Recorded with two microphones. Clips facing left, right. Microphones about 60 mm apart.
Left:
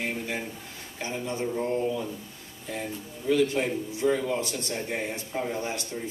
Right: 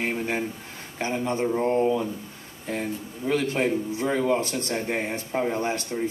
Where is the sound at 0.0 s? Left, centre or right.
Right.